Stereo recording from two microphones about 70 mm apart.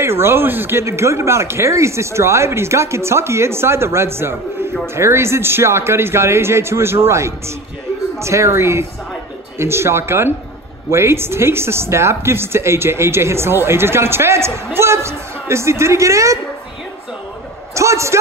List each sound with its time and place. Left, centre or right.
0.0 s a woman's voice: right
0.8 s a woman's voice: right
17.7 s a sound: right